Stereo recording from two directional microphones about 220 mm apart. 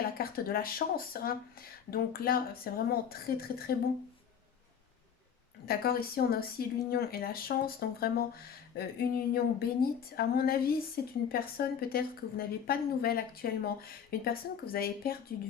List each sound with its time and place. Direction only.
0.2 s a woman's voice: 40° left (ahead or behind)
5.6 s a woman's voice: 45° left (ahead or behind)